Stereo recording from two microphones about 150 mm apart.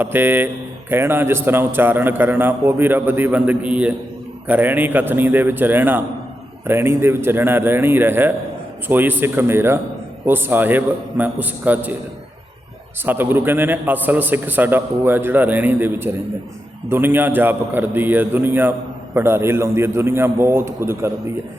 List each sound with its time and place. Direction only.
0.0 s speech: 15° right (ahead or behind)
13.1 s speech: 15° right (ahead or behind)